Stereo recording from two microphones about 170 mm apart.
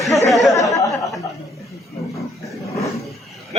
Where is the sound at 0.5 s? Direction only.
20° left (ahead or behind).